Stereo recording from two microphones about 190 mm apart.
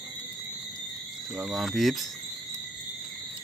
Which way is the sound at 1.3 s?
Centre (ahead or behind).